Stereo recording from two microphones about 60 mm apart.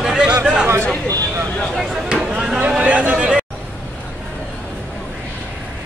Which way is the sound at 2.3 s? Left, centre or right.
Centre.